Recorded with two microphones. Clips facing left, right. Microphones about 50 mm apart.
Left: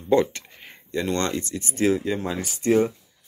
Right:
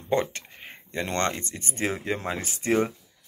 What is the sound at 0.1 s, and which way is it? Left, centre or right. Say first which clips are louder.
Speech: left 6 dB; right.